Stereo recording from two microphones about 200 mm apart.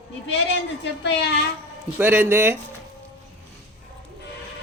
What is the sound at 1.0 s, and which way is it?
Speech, 55° left (ahead or behind).